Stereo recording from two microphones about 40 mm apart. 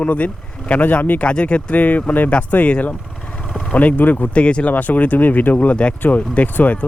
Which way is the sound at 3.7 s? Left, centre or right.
Left.